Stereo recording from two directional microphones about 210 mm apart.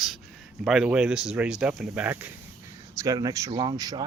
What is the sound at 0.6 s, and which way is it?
Speech, centre (ahead or behind).